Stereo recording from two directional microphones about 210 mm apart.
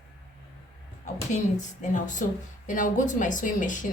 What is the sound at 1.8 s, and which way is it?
Speech, 35° left (ahead or behind).